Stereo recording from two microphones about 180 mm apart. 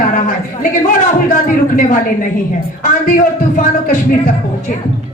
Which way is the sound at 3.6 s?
50° left (ahead or behind).